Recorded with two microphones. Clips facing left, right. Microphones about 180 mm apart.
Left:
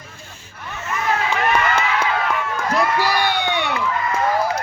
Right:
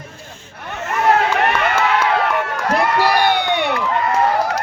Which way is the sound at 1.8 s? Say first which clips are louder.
Right 4 dB; 65° right (ahead or behind).